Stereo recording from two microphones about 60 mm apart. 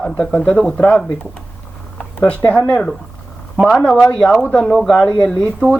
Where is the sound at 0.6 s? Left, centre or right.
Centre.